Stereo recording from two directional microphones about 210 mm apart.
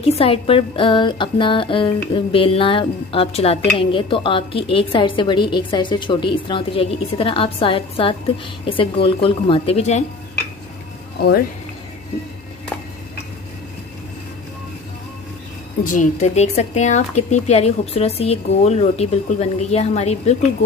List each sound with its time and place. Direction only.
0.0 s speech: 25° left (ahead or behind)
15.8 s speech: 40° left (ahead or behind)